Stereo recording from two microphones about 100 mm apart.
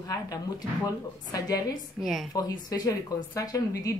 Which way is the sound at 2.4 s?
40° left (ahead or behind).